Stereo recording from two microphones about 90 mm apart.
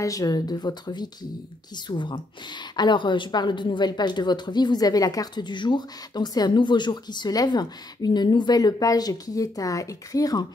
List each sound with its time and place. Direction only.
0.0 s a woman's voice: 40° left (ahead or behind)
1.9 s a woman's voice: 60° left (ahead or behind); by 10.4 s 40° left (ahead or behind)